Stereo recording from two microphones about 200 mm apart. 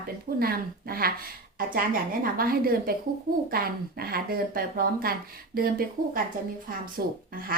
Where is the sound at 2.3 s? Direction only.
45° right (ahead or behind).